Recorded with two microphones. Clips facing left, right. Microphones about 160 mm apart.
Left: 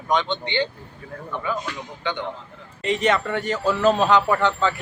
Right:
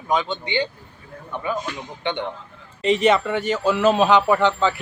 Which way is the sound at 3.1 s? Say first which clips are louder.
Right 1 dB; 10° right (ahead or behind).